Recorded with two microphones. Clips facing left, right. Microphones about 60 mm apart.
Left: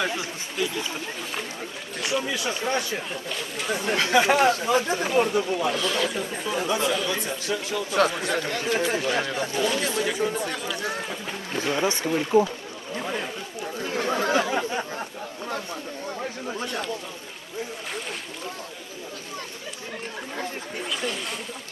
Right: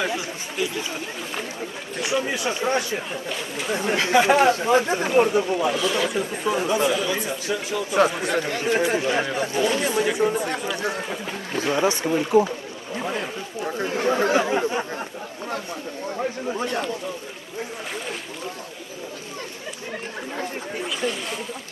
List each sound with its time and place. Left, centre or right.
2.0 s speech: centre
2.2 s speech: right
5.7 s speech: centre
6.4 s speech: right
7.9 s speech: centre
12.9 s speech: centre
13.6 s speech: right
20.8 s speech: centre